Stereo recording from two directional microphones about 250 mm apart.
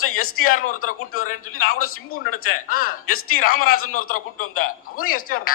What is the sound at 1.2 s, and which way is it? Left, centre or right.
Speech, left.